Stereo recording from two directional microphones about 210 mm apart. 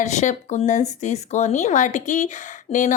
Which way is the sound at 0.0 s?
35° left (ahead or behind).